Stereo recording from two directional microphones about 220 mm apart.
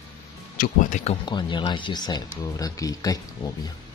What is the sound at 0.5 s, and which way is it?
Speech, 40° left (ahead or behind).